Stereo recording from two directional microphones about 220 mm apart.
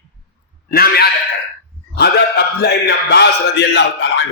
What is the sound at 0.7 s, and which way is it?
Speech, 45° left (ahead or behind).